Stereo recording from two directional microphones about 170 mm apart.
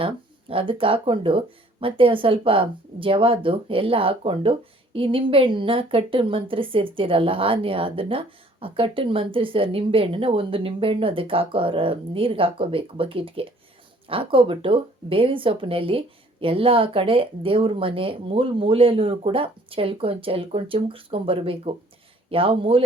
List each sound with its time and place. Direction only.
0.0 s speech: 30° right (ahead or behind)